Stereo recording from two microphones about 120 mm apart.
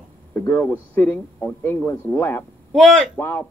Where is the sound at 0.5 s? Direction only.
15° left (ahead or behind).